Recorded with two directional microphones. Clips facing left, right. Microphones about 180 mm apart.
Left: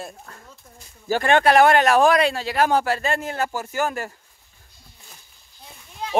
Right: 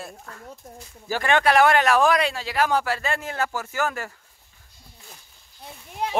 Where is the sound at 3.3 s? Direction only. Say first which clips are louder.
Left 2 dB; 15° left (ahead or behind).